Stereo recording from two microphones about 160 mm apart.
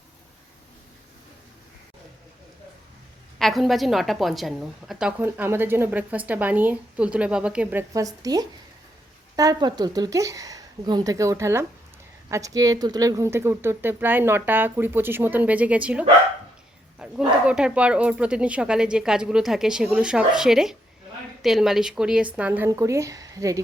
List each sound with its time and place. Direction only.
3.3 s a woman's voice: centre (ahead or behind); by 23.6 s 20° right (ahead or behind)